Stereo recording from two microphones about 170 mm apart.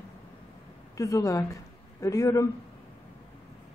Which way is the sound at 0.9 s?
20° left (ahead or behind).